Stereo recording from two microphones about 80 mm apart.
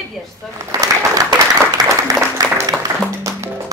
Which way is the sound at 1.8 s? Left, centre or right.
Right.